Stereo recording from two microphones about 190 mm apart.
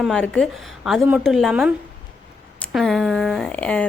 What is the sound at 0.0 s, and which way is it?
Speech, 5° left (ahead or behind).